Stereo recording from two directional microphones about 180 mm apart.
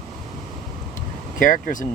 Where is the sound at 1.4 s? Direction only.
45° left (ahead or behind).